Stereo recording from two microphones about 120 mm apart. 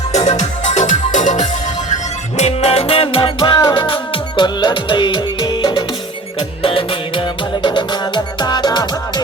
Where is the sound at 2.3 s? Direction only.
65° left (ahead or behind); by 9.2 s 35° left (ahead or behind).